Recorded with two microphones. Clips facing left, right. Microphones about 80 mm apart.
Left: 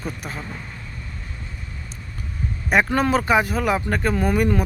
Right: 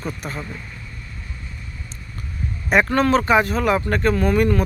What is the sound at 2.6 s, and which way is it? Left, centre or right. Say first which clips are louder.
Speech: right 2 dB; centre.